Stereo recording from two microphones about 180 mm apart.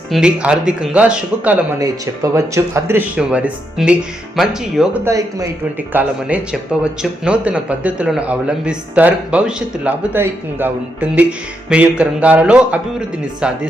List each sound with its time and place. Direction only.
0.1 s speech: 5° right (ahead or behind)
1.8 s speech: 15° right (ahead or behind)
5.0 s speech: 20° right (ahead or behind)